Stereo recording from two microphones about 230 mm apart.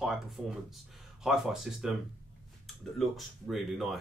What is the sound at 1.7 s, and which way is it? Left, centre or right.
Speech, centre.